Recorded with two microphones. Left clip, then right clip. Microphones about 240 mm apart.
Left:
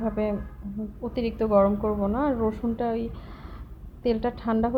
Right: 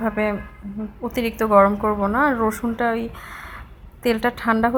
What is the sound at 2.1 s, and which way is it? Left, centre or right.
A woman's voice, right.